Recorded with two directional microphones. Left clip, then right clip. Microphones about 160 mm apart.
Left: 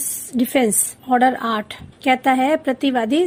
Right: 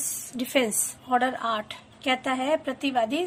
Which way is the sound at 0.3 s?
30° left (ahead or behind).